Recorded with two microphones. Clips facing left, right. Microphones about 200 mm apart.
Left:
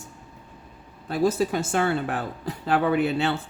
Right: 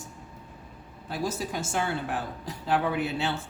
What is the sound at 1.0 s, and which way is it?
Speech, 60° left (ahead or behind).